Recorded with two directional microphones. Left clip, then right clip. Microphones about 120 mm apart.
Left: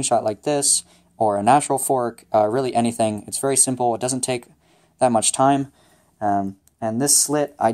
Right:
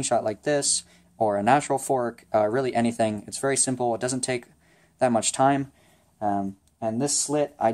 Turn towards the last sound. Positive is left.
turn(degrees=40)  # may be behind; listen again after turning